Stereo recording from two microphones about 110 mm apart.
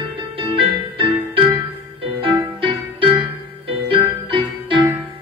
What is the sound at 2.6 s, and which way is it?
Music, 55° right (ahead or behind).